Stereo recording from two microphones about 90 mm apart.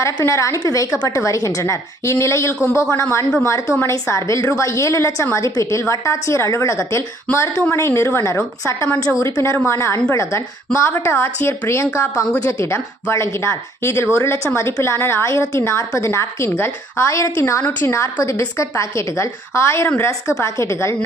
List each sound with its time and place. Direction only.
0.2 s a woman's voice: 35° left (ahead or behind)
14.9 s speech: 30° left (ahead or behind)
17.6 s a woman's voice: 20° left (ahead or behind)
17.9 s speech: 35° left (ahead or behind)